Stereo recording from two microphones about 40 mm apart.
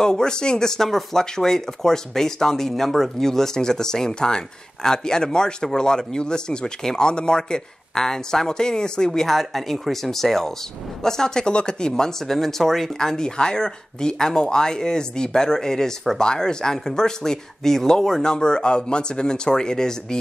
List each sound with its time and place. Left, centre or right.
0.0 s speech: centre
0.8 s speech: centre; by 12.1 s left
12.3 s speech: centre